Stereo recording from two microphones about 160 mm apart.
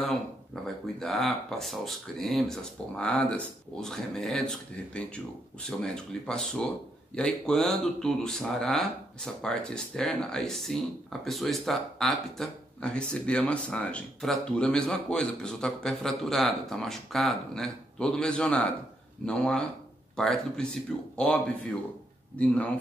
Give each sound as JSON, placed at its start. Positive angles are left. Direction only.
{"t": 0.7, "sound": "speech", "side_deg": 0}